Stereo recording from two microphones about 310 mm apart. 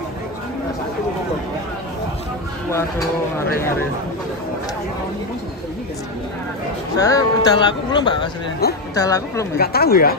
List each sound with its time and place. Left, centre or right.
2.7 s speech: centre
7.0 s speech: centre
9.6 s speech: left